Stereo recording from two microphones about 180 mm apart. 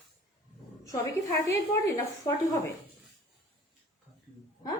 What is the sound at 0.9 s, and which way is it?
Speech, 15° left (ahead or behind).